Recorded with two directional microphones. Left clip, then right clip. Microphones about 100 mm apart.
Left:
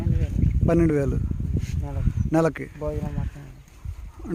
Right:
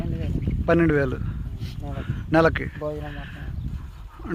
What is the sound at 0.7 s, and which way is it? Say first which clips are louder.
Speech: right 2 dB; 15° left (ahead or behind).